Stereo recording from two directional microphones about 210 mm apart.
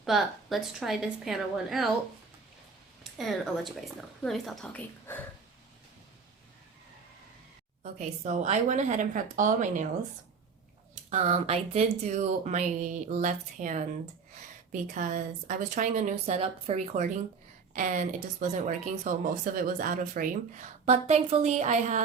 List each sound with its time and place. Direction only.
0.0 s speech: centre (ahead or behind)
3.0 s speech: centre (ahead or behind)
7.9 s speech: 35° right (ahead or behind)
11.1 s speech: 30° right (ahead or behind)